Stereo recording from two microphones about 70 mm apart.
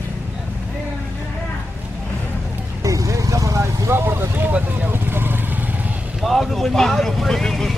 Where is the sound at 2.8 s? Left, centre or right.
Right.